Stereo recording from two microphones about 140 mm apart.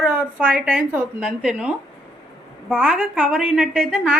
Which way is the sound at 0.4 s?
10° right (ahead or behind).